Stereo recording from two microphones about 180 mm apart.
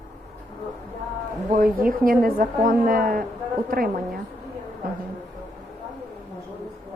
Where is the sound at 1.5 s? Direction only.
50° right (ahead or behind).